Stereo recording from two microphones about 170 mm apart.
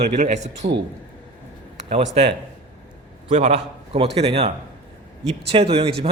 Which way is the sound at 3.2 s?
40° right (ahead or behind).